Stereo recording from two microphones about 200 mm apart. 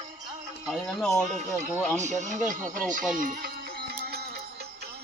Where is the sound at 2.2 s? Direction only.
40° right (ahead or behind).